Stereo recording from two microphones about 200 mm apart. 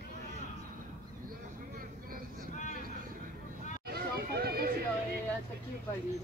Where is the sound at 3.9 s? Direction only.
50° right (ahead or behind).